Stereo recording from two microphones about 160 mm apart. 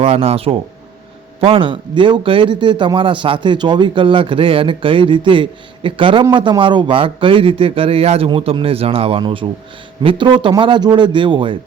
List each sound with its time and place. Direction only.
0.0 s a man's voice: 40° right (ahead or behind)